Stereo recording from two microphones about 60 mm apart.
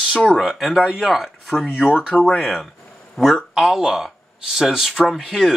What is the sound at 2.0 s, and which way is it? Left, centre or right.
Speech, left.